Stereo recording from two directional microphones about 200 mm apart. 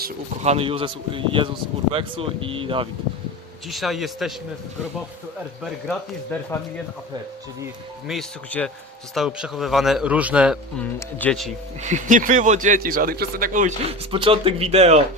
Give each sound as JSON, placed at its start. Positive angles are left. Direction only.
{"t": 0.4, "sound": "speech", "side_deg": -30}
{"t": 3.7, "sound": "speech", "side_deg": 0}
{"t": 5.9, "sound": "speech", "side_deg": 10}
{"t": 8.0, "sound": "speech", "side_deg": 5}
{"t": 10.8, "sound": "speech", "side_deg": 5}
{"t": 11.8, "sound": "speech", "side_deg": -35}
{"t": 14.1, "sound": "speech", "side_deg": -25}